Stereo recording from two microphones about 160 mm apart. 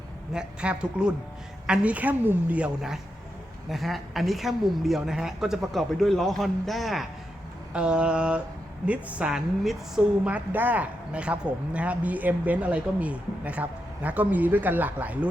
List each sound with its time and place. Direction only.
0.3 s a woman's voice: 5° right (ahead or behind)